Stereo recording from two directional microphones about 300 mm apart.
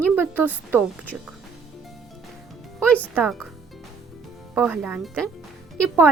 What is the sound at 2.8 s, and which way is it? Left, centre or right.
Speech, centre.